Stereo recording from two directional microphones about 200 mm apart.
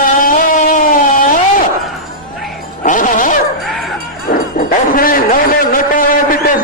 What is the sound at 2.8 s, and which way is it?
Music, 40° left (ahead or behind).